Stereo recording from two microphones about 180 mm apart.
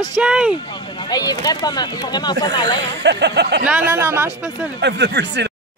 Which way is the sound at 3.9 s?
15° right (ahead or behind).